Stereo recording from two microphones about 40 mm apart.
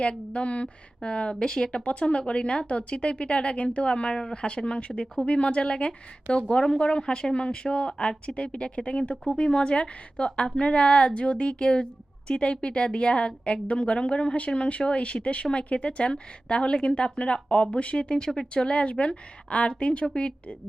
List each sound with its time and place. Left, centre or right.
0.0 s a woman's voice: left